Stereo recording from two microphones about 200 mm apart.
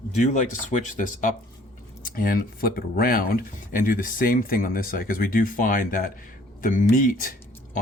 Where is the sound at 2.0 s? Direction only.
45° left (ahead or behind).